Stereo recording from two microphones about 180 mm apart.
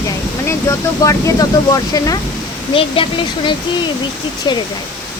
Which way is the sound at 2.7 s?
30° left (ahead or behind).